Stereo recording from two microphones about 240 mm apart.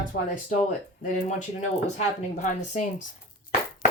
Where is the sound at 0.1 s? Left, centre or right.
Left.